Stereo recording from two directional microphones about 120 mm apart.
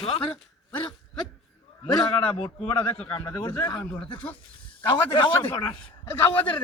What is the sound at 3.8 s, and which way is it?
Speech, 10° left (ahead or behind).